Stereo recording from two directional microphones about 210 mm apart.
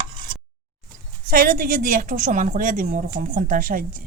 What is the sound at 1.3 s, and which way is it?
A woman's voice, 40° right (ahead or behind).